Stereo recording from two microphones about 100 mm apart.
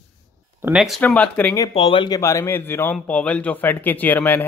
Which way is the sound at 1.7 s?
60° left (ahead or behind).